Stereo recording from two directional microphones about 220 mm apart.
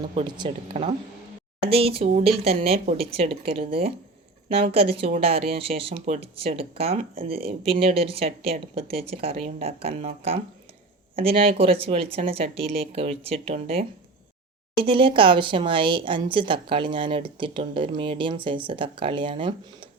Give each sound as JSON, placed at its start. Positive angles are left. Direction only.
{"t": 0.1, "sound": "speech", "side_deg": -25}